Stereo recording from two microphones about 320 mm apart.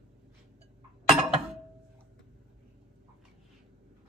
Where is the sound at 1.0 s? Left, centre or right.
Centre.